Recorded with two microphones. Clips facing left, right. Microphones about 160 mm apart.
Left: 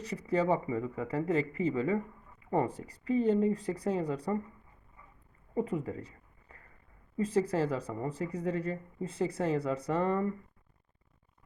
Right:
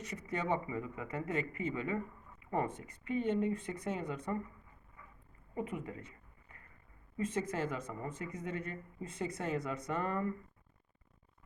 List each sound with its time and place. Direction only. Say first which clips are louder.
0.0 s speech: left 9 dB; 35° left (ahead or behind)
5.5 s a sound: left 7 dB; 35° left (ahead or behind)
7.2 s speech: left 7 dB; 35° left (ahead or behind)